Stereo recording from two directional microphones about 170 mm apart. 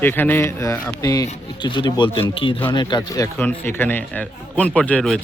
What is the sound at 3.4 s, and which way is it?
Speech, 10° left (ahead or behind).